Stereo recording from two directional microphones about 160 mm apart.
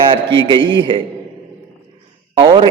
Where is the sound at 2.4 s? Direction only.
30° right (ahead or behind).